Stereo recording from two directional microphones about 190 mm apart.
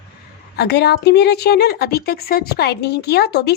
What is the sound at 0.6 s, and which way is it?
A woman's voice, 60° left (ahead or behind).